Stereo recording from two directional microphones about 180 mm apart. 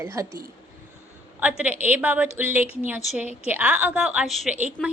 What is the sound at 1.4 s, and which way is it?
A woman's voice, 10° right (ahead or behind).